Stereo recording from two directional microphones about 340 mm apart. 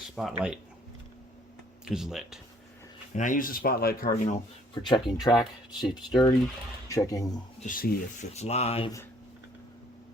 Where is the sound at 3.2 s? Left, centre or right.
Left.